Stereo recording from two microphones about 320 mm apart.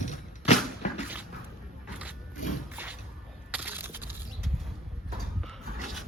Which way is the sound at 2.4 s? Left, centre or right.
Left.